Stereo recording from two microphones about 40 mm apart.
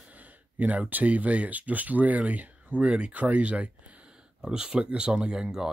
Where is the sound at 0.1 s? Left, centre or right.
Right.